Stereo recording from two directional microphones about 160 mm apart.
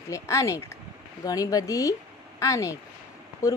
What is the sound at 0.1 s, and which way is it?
Speech, 20° left (ahead or behind).